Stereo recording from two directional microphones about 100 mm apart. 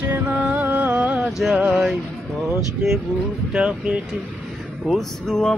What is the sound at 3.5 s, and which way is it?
Music, 10° right (ahead or behind).